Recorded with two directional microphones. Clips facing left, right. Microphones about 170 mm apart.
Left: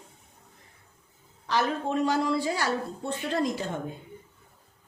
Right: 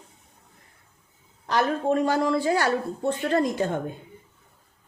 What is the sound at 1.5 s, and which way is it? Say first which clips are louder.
A woman's voice: right 4 dB; 50° right (ahead or behind).